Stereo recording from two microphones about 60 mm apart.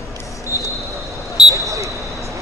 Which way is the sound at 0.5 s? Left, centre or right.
Left.